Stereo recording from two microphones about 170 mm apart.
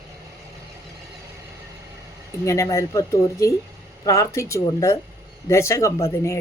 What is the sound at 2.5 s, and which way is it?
Speech, 15° left (ahead or behind).